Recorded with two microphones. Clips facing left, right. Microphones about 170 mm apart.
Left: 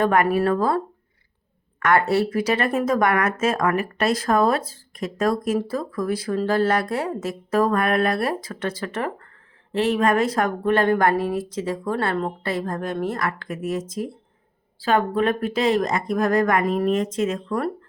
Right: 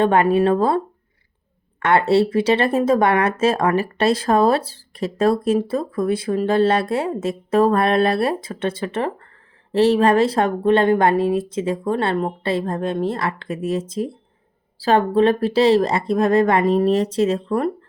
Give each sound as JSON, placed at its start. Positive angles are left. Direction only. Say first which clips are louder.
{"t": 0.0, "sound": "a woman's voice", "louder": "right 3 dB", "side_deg": -30}
{"t": 1.8, "sound": "a woman's voice", "louder": "right 3 dB", "side_deg": -30}